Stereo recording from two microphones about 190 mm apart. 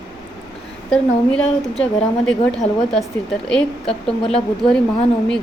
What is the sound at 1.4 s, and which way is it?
Speech, 35° left (ahead or behind).